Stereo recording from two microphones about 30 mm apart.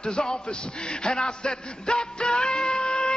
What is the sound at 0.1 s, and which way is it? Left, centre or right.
Speech, left.